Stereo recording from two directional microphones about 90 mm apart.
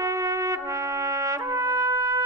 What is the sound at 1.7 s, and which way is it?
Trumpet, 45° right (ahead or behind).